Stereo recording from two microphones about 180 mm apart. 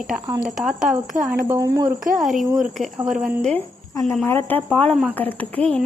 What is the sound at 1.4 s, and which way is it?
Speech, 20° right (ahead or behind).